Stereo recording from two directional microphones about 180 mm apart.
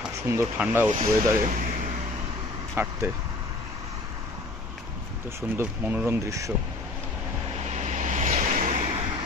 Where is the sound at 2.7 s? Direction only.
10° right (ahead or behind).